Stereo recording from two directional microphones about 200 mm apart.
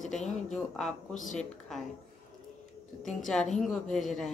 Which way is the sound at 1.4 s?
Centre (ahead or behind).